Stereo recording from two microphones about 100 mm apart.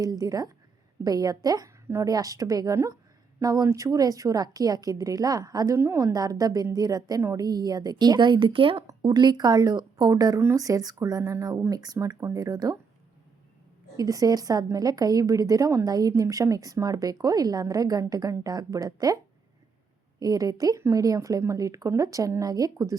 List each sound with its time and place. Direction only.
0.0 s a woman's voice: 35° right (ahead or behind); by 8.8 s 60° right (ahead or behind)
9.0 s a woman's voice: 50° right (ahead or behind)
13.9 s a woman's voice: 35° right (ahead or behind)